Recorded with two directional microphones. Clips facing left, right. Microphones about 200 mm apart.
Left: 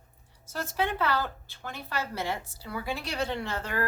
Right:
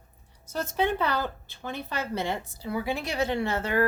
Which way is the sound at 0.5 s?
20° right (ahead or behind).